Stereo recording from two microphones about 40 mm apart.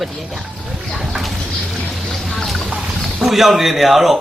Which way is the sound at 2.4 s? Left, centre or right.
Centre.